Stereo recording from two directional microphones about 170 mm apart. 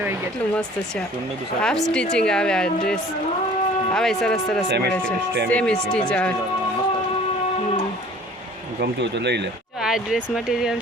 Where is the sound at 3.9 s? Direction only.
5° left (ahead or behind).